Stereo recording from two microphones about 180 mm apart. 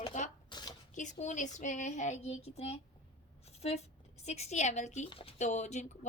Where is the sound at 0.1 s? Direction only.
45° left (ahead or behind).